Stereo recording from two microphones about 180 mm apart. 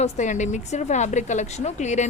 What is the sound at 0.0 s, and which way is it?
A woman's voice, 40° left (ahead or behind).